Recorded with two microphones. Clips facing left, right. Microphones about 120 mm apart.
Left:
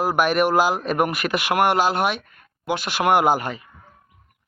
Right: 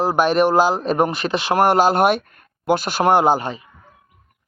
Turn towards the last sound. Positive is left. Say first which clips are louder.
# right 2 dB
turn(degrees=-25)  # may be behind; listen again after turning